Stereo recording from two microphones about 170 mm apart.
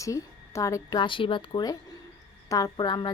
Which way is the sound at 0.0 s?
20° left (ahead or behind).